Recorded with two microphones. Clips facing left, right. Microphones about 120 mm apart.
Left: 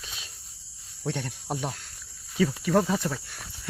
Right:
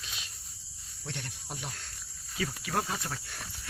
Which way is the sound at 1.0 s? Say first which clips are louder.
Left 10 dB; 90° left.